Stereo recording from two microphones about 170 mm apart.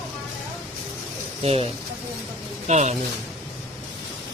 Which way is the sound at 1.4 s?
35° right (ahead or behind).